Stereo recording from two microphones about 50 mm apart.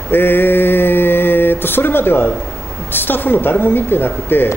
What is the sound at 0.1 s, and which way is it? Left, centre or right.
Mantra, left.